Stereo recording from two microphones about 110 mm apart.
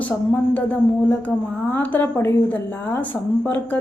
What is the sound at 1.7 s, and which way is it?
A woman's voice, 15° left (ahead or behind).